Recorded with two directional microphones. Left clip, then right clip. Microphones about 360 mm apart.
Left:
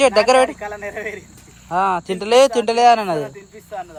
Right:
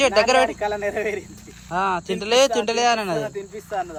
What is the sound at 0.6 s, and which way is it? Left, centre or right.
Speech, right.